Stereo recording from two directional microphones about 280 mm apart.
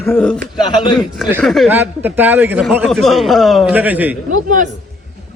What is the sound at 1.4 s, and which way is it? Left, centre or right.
A man's voice, centre.